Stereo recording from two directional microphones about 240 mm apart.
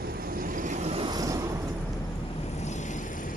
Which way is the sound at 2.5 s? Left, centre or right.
Left.